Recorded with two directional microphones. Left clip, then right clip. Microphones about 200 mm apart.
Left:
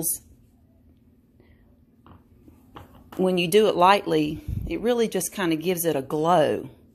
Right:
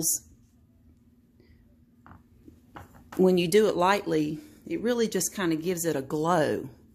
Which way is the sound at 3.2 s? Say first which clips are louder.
Left 2 dB; 15° right (ahead or behind).